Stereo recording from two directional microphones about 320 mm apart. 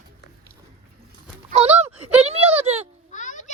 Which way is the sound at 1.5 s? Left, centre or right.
Centre.